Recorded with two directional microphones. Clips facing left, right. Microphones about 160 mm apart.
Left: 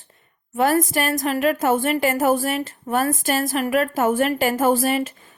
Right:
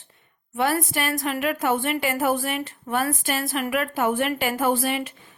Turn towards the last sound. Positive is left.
turn(degrees=40)  # may be behind; listen again after turning